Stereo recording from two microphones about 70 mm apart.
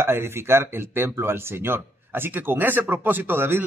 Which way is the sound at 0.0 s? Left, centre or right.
Right.